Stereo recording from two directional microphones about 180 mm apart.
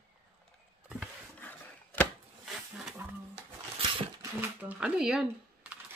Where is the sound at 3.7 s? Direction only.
30° right (ahead or behind).